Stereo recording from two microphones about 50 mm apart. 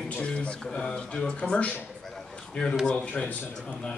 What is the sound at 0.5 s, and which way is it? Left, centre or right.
A man's voice, centre.